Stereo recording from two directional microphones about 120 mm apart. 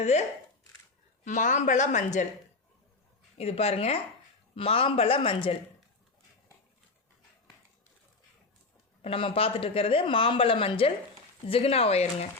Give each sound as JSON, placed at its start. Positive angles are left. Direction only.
{"t": 0.0, "sound": "speech", "side_deg": 70}
{"t": 1.2, "sound": "speech", "side_deg": 90}
{"t": 3.3, "sound": "speech", "side_deg": 60}
{"t": 9.0, "sound": "speech", "side_deg": 50}